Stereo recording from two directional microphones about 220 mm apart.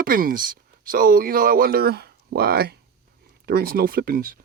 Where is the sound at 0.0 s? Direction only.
40° right (ahead or behind).